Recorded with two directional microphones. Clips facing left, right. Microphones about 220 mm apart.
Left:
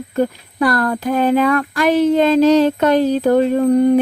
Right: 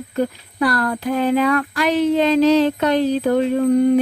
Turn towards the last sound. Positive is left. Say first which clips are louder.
# left 2 dB
turn(degrees=45)  # may be behind; listen again after turning